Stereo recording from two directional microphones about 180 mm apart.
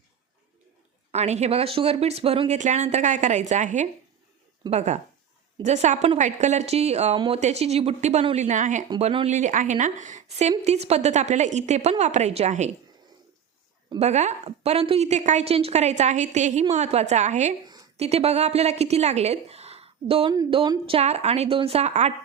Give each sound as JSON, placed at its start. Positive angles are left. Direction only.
{"t": 1.1, "sound": "speech", "side_deg": -35}
{"t": 14.0, "sound": "speech", "side_deg": -40}